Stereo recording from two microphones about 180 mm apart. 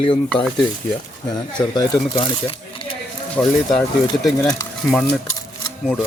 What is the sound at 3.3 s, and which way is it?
Speech, 5° left (ahead or behind).